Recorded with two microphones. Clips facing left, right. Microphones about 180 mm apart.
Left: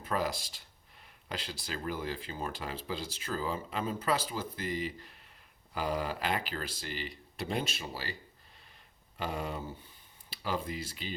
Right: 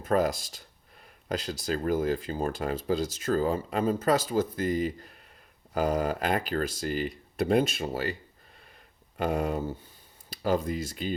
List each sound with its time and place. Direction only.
0.0 s speech: 45° right (ahead or behind)
9.1 s speech: 50° right (ahead or behind)